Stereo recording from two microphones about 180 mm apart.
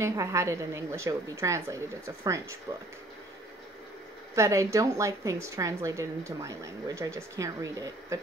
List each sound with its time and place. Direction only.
0.0 s a woman's voice: 15° right (ahead or behind)
4.4 s a woman's voice: 15° right (ahead or behind)